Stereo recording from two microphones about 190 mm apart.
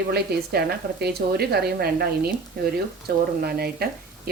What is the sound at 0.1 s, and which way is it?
A woman's voice, 55° right (ahead or behind).